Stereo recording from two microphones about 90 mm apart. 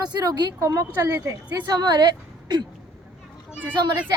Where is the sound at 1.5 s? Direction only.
45° right (ahead or behind).